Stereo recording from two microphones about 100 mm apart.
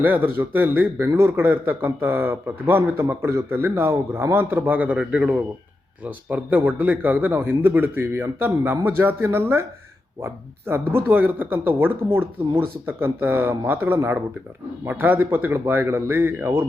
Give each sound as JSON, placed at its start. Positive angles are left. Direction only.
{"t": 0.0, "sound": "a man's voice", "side_deg": -20}